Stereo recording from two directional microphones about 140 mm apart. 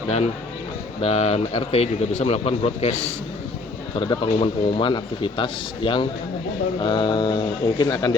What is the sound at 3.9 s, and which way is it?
A man's voice, 35° left (ahead or behind).